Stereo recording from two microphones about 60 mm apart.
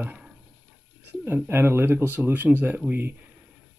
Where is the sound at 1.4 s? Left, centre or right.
Right.